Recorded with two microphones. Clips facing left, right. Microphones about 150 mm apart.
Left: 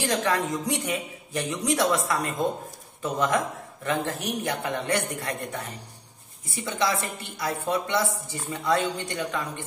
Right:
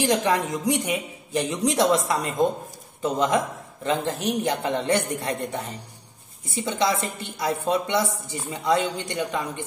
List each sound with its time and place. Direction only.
0.0 s a woman's voice: 20° right (ahead or behind)